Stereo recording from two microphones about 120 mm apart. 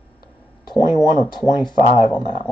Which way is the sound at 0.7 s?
35° left (ahead or behind).